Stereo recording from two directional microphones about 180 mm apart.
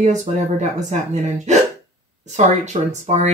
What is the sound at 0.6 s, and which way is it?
Speech, 40° right (ahead or behind).